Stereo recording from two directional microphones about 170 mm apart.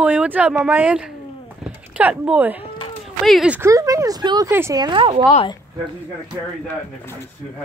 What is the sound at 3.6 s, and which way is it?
Speech, 20° right (ahead or behind).